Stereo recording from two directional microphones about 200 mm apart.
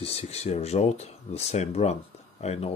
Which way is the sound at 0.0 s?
30° left (ahead or behind).